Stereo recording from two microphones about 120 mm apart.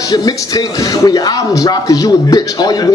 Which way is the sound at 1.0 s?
30° left (ahead or behind).